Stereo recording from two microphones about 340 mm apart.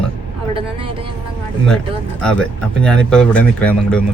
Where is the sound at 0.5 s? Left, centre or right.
Centre.